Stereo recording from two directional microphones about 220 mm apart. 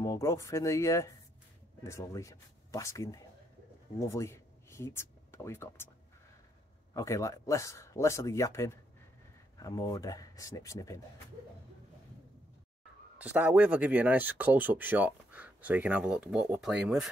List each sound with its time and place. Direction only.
0.0 s speech: 15° left (ahead or behind)
6.9 s speech: 15° left (ahead or behind)
13.2 s speech: 10° right (ahead or behind)